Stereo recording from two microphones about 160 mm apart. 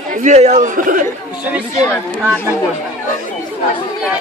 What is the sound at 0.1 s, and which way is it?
Speech, 50° right (ahead or behind).